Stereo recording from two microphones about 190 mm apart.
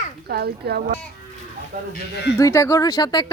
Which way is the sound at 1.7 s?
45° right (ahead or behind).